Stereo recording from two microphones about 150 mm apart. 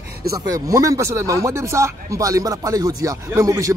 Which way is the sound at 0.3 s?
20° right (ahead or behind).